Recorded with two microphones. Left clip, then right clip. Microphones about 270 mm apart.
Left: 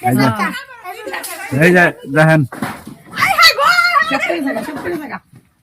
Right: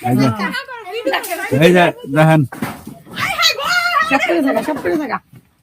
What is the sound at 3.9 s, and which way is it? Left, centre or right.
Speech, centre.